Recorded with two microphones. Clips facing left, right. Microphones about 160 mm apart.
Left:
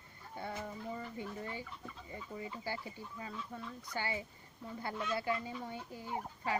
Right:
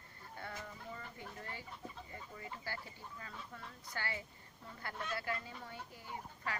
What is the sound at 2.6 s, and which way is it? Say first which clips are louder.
Speech: left 5 dB; 15° left (ahead or behind).